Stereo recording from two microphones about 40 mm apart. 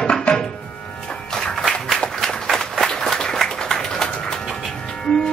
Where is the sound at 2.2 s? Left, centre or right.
Centre.